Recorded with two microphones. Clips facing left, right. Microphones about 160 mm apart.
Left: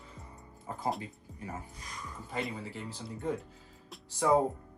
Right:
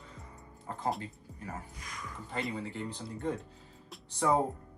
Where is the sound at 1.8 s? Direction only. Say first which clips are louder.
Even; 30° left (ahead or behind).